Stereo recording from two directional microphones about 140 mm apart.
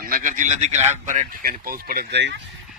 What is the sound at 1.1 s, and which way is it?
Speech, 70° right (ahead or behind).